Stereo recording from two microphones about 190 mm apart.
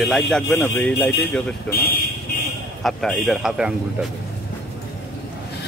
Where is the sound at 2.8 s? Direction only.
Centre (ahead or behind).